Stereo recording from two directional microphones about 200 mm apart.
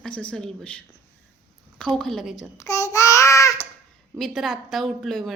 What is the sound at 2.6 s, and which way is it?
Speech, 15° left (ahead or behind).